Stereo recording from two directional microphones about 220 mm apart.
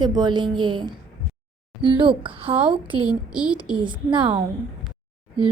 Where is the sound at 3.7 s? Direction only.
20° right (ahead or behind).